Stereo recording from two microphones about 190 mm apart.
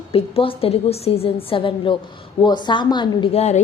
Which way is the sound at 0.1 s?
30° left (ahead or behind).